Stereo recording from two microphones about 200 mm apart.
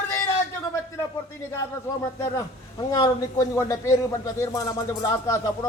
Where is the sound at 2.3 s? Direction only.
20° left (ahead or behind).